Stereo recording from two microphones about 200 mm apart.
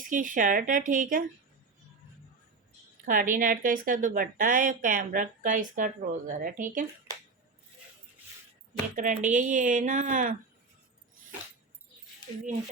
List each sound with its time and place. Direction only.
0.0 s speech: 40° right (ahead or behind)
3.1 s speech: 45° right (ahead or behind)
9.0 s speech: 40° right (ahead or behind)